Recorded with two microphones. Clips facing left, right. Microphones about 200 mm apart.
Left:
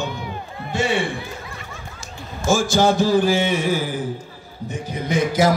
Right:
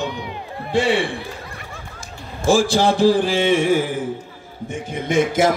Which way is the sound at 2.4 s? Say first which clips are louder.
Right 1 dB; 30° right (ahead or behind).